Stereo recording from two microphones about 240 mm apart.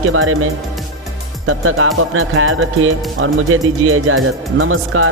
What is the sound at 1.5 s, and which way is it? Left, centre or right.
Speech, right.